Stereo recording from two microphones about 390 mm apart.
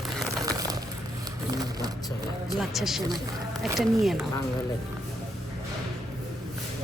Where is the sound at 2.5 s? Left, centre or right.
Centre.